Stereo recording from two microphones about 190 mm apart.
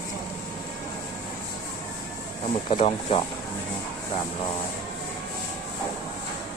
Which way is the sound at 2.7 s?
30° left (ahead or behind).